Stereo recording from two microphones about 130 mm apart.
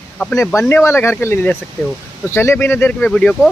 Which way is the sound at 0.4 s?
20° left (ahead or behind).